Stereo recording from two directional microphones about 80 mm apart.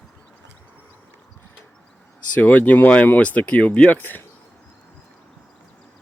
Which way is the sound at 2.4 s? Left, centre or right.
Left.